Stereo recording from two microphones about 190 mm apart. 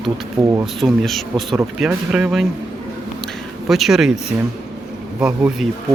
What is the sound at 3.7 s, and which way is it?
Speech, centre (ahead or behind).